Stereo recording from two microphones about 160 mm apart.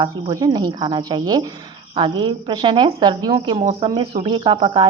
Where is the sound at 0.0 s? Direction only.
25° right (ahead or behind).